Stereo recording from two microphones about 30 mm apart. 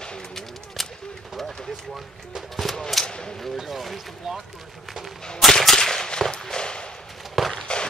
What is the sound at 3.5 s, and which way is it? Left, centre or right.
Speech, centre.